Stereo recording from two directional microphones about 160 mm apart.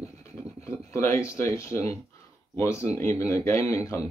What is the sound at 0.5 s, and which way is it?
Speech, 20° left (ahead or behind).